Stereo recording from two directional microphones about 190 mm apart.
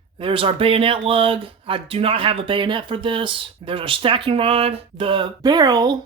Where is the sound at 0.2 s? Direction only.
30° right (ahead or behind).